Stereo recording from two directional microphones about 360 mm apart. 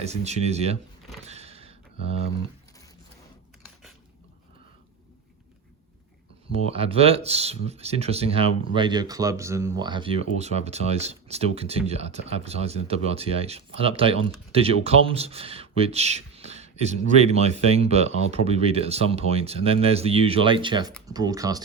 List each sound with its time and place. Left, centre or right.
0.0 s speech: centre
1.3 s a sound: centre
6.5 s speech: centre